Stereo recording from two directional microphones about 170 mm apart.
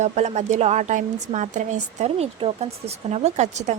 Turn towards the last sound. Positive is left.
turn(degrees=-45)  # may be behind; listen again after turning